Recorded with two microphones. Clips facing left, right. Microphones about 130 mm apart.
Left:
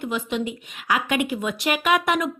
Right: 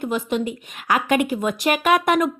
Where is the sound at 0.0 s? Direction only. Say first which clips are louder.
Right 3 dB; 45° right (ahead or behind).